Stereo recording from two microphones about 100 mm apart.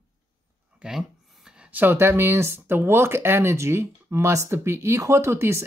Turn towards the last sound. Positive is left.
turn(degrees=-25)  # may be behind; listen again after turning